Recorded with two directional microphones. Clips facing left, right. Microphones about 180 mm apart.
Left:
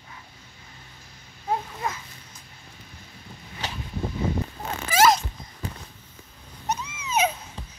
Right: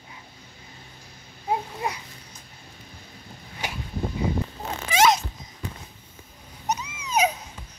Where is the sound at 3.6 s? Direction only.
10° right (ahead or behind).